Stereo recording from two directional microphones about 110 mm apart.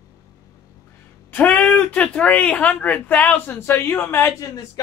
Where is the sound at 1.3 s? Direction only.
15° left (ahead or behind).